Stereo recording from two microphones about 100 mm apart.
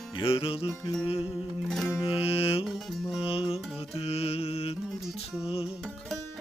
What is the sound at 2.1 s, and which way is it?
Music, 70° left (ahead or behind).